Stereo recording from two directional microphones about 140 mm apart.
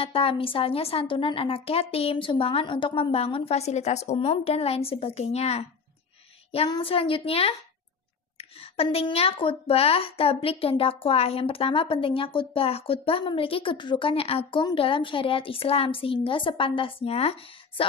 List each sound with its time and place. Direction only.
0.0 s a woman's voice: 40° left (ahead or behind)
6.7 s a woman's voice: 40° left (ahead or behind)